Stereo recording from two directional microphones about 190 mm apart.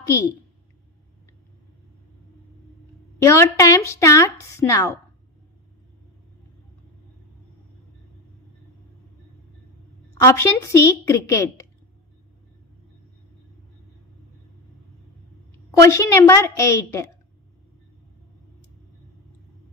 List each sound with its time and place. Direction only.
0.0 s a woman's voice: 15° left (ahead or behind)
3.2 s a woman's voice: 15° left (ahead or behind)
10.2 s a woman's voice: 15° left (ahead or behind)
15.8 s a woman's voice: 15° left (ahead or behind)